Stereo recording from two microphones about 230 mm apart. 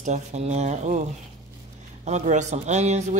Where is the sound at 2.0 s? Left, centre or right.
Right.